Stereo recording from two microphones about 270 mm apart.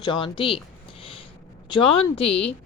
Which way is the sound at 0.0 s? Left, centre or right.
Centre.